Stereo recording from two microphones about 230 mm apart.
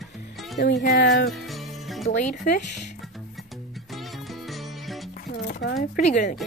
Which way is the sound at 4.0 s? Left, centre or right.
Centre.